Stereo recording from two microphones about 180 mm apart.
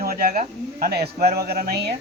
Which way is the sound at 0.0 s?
50° right (ahead or behind).